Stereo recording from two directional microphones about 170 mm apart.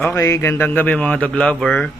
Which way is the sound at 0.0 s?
15° left (ahead or behind).